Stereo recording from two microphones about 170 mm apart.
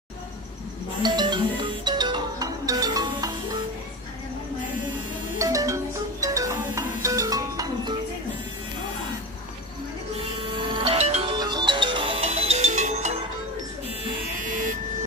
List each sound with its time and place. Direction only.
1.0 s music: 25° right (ahead or behind)
5.4 s music: 20° right (ahead or behind)
10.5 s music: 30° right (ahead or behind)
11.3 s music: 25° right (ahead or behind); by 13.2 s 40° right (ahead or behind)
14.4 s vehicle: 50° right (ahead or behind)